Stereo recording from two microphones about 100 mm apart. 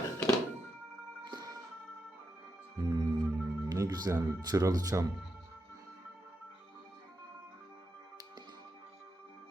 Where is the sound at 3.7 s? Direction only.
40° right (ahead or behind).